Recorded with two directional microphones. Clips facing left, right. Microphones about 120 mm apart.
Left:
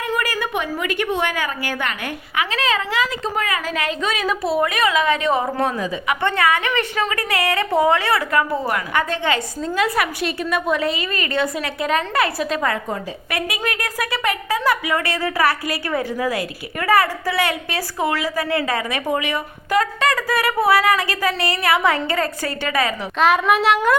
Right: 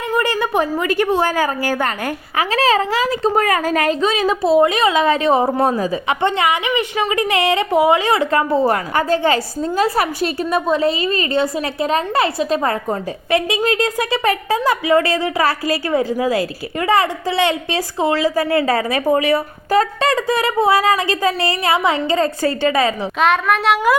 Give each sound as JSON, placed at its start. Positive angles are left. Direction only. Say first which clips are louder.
{"t": 0.2, "sound": "a woman's voice", "louder": "right 6 dB", "side_deg": -30}
{"t": 4.0, "sound": "a woman's voice", "louder": "right 5 dB", "side_deg": -30}
{"t": 6.2, "sound": "a woman's voice", "louder": "right 1 dB", "side_deg": -20}
{"t": 23.2, "sound": "a woman's voice", "louder": "even", "side_deg": 5}